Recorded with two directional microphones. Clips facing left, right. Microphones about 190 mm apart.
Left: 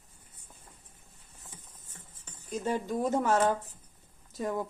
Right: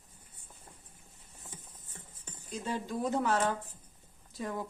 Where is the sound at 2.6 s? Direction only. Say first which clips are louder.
Left 4 dB; 45° left (ahead or behind).